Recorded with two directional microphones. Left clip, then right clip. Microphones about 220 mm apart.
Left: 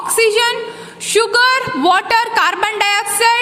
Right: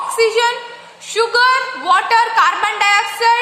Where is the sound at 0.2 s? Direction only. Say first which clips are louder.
Left 1 dB; 45° left (ahead or behind).